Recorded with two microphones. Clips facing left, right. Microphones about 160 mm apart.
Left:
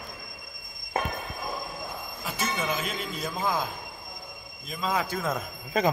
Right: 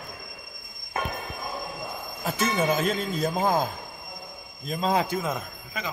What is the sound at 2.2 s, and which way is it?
Speech, 45° right (ahead or behind).